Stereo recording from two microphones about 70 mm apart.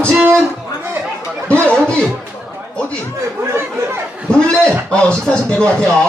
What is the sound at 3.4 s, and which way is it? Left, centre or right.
Speech, right.